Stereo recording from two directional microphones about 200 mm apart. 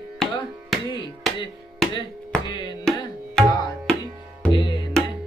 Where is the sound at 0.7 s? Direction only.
Centre (ahead or behind).